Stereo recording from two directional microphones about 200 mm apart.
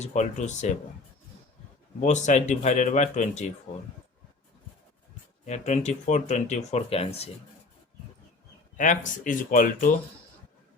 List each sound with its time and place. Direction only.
0.0 s speech: 35° left (ahead or behind)
2.0 s speech: 35° left (ahead or behind)
5.5 s speech: 35° left (ahead or behind)
8.8 s speech: 40° left (ahead or behind)